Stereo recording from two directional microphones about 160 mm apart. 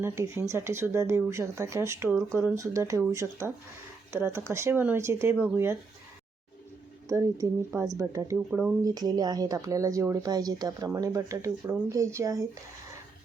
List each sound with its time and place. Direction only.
0.0 s speech: 15° right (ahead or behind)
7.1 s speech: 20° right (ahead or behind)
8.4 s speech: 5° right (ahead or behind)
8.8 s speech: 25° right (ahead or behind)